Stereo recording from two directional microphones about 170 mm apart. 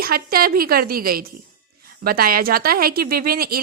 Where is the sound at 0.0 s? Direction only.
60° right (ahead or behind).